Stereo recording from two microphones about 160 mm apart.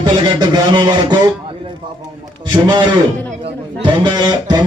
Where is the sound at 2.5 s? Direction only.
30° right (ahead or behind).